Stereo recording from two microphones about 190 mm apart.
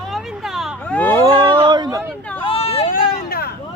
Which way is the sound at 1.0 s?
10° left (ahead or behind).